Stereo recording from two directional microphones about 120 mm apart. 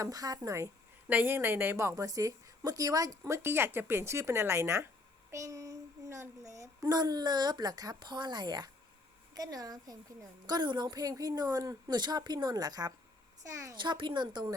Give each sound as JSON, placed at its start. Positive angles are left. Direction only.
{"t": 0.0, "sound": "a woman's voice", "side_deg": -30}
{"t": 1.0, "sound": "a woman's voice", "side_deg": -15}
{"t": 13.7, "sound": "a woman's voice", "side_deg": -40}